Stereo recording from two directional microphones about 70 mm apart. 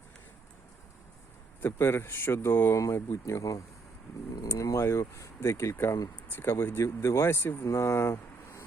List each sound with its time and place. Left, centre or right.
1.6 s speech: left
2.7 s speech: left
7.6 s speech: left